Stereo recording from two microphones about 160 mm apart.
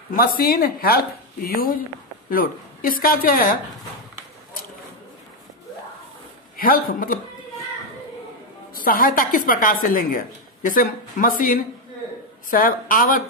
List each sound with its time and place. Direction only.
0.1 s speech: 65° left (ahead or behind)
6.5 s a man's voice: 65° left (ahead or behind)
8.7 s speech: 65° left (ahead or behind)